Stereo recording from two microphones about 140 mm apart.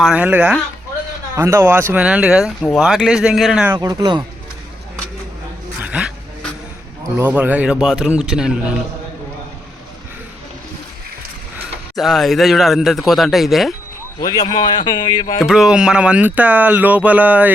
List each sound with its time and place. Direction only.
0.0 s speech: 10° right (ahead or behind)
3.7 s speech: 25° right (ahead or behind)
5.8 s dog: 5° right (ahead or behind)
7.2 s speech: 10° right (ahead or behind)
11.9 s speech: centre (ahead or behind)
14.2 s a man's voice: 30° left (ahead or behind)
15.4 s speech: 5° right (ahead or behind)